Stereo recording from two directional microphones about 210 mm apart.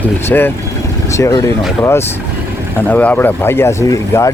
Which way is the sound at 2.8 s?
10° left (ahead or behind).